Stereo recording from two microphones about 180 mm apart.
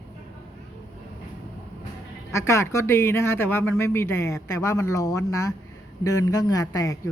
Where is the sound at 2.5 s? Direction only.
15° left (ahead or behind).